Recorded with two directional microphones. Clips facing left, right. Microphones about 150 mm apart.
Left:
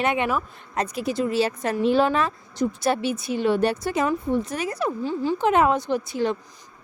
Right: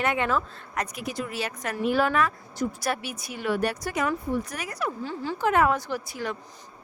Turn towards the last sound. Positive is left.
turn(degrees=25)  # may be behind; listen again after turning